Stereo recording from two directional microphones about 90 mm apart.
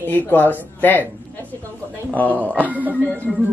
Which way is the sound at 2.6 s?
20° right (ahead or behind).